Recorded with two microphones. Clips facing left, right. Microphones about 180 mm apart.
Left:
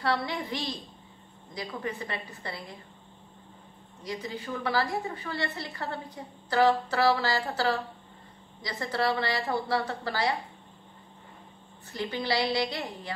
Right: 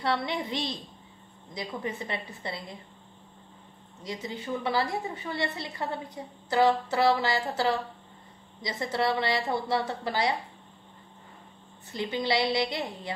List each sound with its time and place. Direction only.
0.0 s a woman's voice: 20° right (ahead or behind)
4.0 s a woman's voice: 20° right (ahead or behind)
11.9 s a woman's voice: 20° right (ahead or behind)